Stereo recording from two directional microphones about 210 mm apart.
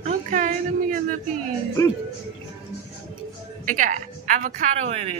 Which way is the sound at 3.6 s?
40° right (ahead or behind).